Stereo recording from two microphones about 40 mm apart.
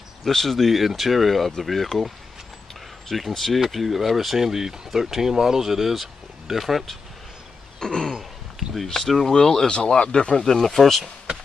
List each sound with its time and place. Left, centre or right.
0.2 s speech: centre
3.1 s speech: centre
7.8 s a sound: centre
8.2 s a sound: centre
8.8 s speech: centre
9.7 s speech: left
10.4 s speech: centre